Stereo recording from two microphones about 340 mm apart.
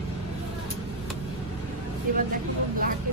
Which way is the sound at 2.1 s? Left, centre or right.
Right.